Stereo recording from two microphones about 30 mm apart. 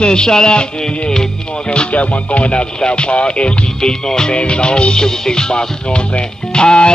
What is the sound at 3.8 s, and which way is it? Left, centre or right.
Music, left.